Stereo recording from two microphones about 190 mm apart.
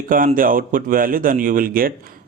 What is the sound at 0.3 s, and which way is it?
Speech, 45° right (ahead or behind).